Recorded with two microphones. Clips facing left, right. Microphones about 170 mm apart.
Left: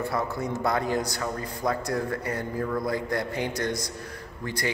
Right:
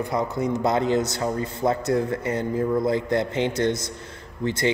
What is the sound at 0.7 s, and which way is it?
Speech, 20° right (ahead or behind).